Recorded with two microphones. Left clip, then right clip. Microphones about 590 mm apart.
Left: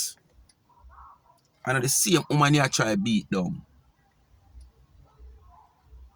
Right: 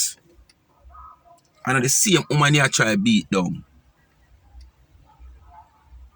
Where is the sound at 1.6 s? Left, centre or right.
Left.